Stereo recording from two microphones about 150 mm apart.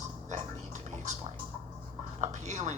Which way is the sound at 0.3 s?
50° right (ahead or behind).